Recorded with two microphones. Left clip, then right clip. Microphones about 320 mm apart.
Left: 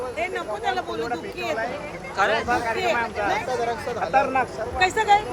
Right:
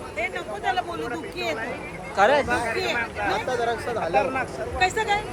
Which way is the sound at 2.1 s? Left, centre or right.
Centre.